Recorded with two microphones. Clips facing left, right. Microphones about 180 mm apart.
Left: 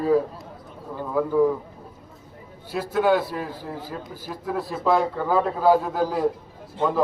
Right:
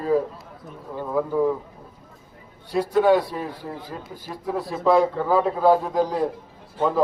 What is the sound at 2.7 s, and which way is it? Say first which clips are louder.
A man's voice: right 3 dB; 5° left (ahead or behind).